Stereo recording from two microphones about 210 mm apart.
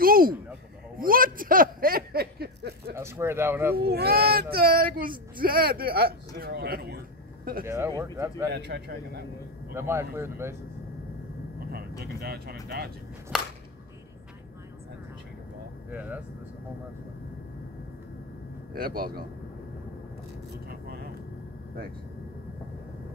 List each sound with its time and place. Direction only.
0.0 s a sound: 45° right (ahead or behind)
3.0 s speech: 10° right (ahead or behind)
3.7 s speech: 50° right (ahead or behind)
7.6 s speech: 10° right (ahead or behind)
8.5 s speech: 55° right (ahead or behind)
9.8 s speech: 10° right (ahead or behind)
12.0 s speech: 50° right (ahead or behind)
13.3 s a sound: 5° right (ahead or behind)
15.9 s speech: 10° right (ahead or behind)
18.8 s speech: 45° right (ahead or behind)
20.6 s vehicle: 50° right (ahead or behind)